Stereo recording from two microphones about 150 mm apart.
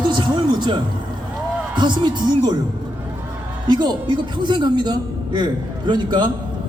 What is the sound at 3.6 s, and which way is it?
A man's voice, 30° right (ahead or behind).